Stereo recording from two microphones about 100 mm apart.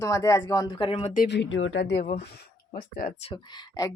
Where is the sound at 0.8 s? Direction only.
70° left (ahead or behind).